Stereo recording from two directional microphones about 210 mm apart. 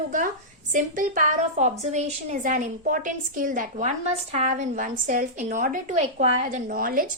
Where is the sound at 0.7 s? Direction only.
40° right (ahead or behind).